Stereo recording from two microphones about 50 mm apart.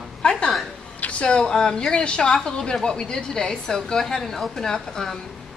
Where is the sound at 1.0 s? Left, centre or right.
Left.